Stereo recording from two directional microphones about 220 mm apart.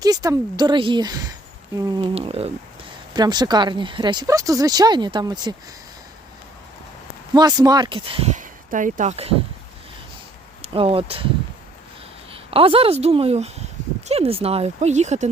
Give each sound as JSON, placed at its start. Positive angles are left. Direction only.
{"t": 0.0, "sound": "a woman's voice", "side_deg": -15}
{"t": 7.3, "sound": "speech", "side_deg": -20}
{"t": 10.6, "sound": "speech", "side_deg": -25}
{"t": 12.3, "sound": "speech", "side_deg": -25}